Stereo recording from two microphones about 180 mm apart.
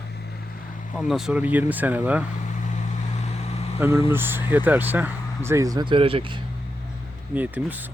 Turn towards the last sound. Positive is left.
turn(degrees=-10)  # may be behind; listen again after turning